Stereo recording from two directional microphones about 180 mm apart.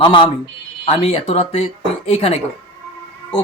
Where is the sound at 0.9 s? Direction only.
30° left (ahead or behind).